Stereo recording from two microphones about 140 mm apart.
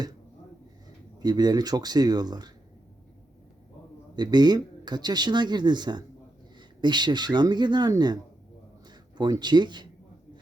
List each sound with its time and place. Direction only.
1.2 s speech: 30° right (ahead or behind)
4.1 s speech: 30° right (ahead or behind)